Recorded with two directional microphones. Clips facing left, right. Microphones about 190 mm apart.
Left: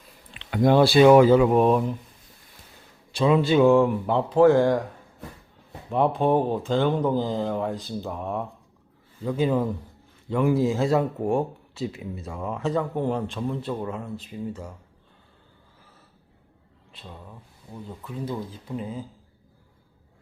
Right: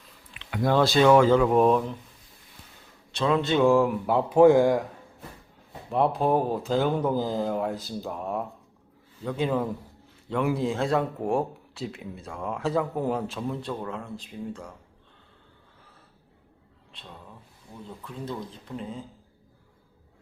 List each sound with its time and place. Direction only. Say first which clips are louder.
0.3 s a sound: left 6 dB; 30° left (ahead or behind)
0.7 s speech: left 4 dB; 10° left (ahead or behind)
3.1 s speech: left 4 dB; 10° left (ahead or behind); by 4.8 s 10° right (ahead or behind)
5.9 s speech: left 2 dB; centre (ahead or behind)
16.9 s speech: left 3 dB; 5° left (ahead or behind)